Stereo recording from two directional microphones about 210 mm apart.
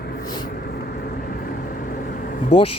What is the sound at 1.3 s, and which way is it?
Vehicle, 45° left (ahead or behind).